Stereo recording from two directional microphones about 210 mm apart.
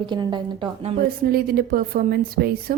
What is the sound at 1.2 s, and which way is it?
A woman's voice, 45° right (ahead or behind).